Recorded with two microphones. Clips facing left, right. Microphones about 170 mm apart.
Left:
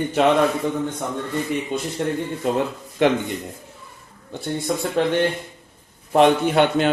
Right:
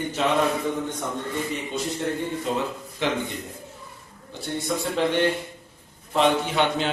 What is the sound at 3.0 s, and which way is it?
Speech, 55° left (ahead or behind).